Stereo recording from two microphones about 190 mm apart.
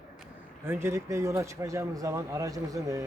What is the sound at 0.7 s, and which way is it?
Speech, 10° right (ahead or behind).